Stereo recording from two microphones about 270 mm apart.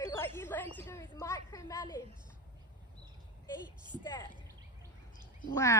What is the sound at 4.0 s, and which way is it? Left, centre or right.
Speech, centre.